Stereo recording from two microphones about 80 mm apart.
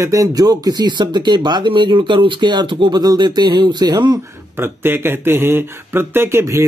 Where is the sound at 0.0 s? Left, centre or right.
Right.